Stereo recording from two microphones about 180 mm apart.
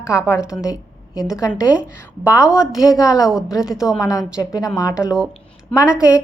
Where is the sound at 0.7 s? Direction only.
5° right (ahead or behind).